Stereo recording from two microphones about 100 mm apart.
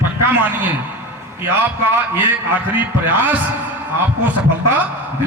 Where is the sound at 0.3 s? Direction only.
15° right (ahead or behind).